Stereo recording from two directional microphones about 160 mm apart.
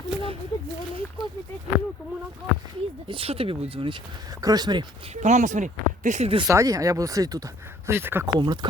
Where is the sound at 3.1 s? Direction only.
35° right (ahead or behind).